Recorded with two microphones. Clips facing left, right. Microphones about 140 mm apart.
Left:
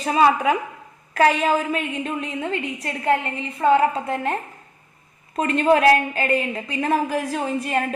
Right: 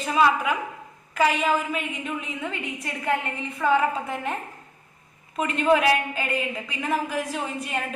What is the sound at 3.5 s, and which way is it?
Speech, 30° left (ahead or behind).